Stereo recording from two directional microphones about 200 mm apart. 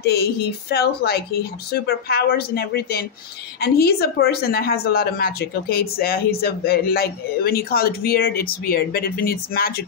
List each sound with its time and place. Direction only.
0.0 s speech: 55° left (ahead or behind)